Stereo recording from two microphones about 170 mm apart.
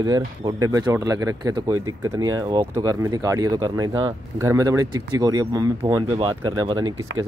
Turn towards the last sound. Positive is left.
turn(degrees=-25)  # may be behind; listen again after turning